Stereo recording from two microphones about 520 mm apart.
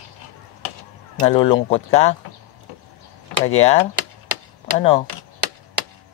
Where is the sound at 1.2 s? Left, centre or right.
Centre.